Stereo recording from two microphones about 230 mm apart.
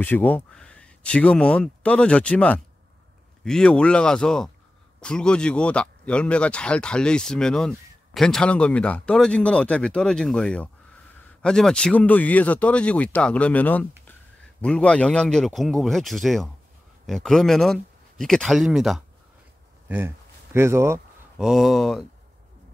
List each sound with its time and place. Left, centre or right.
0.0 s speech: centre
20.5 s speech: centre